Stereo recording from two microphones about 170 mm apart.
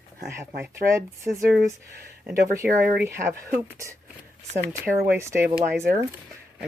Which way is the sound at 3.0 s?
15° right (ahead or behind).